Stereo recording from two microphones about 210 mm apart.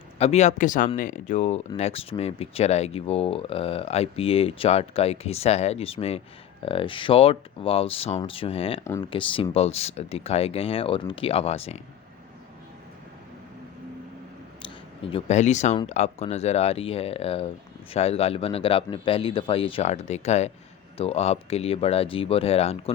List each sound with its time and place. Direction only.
0.2 s speech: 30° left (ahead or behind)
8.8 s speech: 15° left (ahead or behind)
9.0 s speech: 25° left (ahead or behind)
14.6 s speech: 25° left (ahead or behind)